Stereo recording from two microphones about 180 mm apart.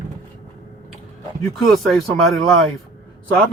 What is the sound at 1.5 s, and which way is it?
Speech, centre (ahead or behind).